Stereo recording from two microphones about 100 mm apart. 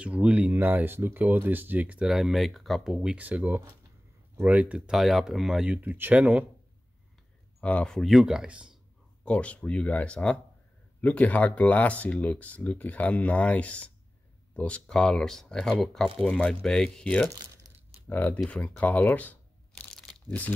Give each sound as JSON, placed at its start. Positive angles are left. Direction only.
{"t": 0.0, "sound": "speech", "side_deg": -10}
{"t": 2.0, "sound": "speech", "side_deg": -5}
{"t": 5.8, "sound": "speech", "side_deg": -20}
{"t": 7.6, "sound": "speech", "side_deg": 10}
{"t": 9.2, "sound": "speech", "side_deg": 10}
{"t": 18.5, "sound": "crunch", "side_deg": 15}